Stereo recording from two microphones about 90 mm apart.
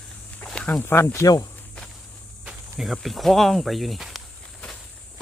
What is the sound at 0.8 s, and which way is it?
Speech, 25° left (ahead or behind).